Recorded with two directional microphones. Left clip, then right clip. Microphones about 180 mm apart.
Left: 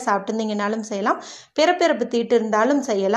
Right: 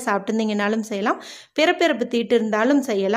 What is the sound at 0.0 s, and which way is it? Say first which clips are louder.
A woman's voice: left 1 dB; 25° right (ahead or behind).